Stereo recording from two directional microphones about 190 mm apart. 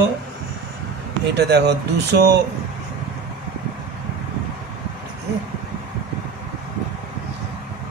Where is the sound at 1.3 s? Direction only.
60° right (ahead or behind).